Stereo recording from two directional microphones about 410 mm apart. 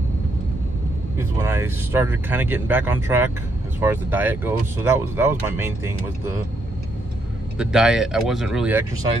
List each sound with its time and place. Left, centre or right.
1.1 s speech: centre
7.5 s speech: centre